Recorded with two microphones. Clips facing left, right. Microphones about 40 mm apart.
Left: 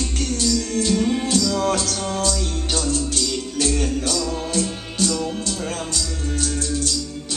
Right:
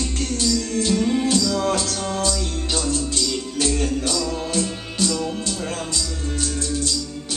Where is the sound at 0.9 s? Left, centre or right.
Centre.